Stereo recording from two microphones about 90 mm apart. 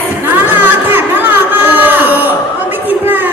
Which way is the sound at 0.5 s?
20° right (ahead or behind).